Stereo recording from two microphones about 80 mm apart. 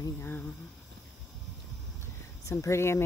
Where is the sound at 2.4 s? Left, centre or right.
Left.